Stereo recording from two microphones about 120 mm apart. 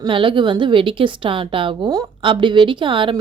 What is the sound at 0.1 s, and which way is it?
A woman's voice, 45° right (ahead or behind).